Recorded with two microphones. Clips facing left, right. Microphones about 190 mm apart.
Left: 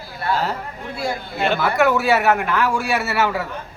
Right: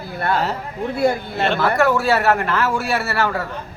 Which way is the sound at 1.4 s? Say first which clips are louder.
Even; 5° left (ahead or behind).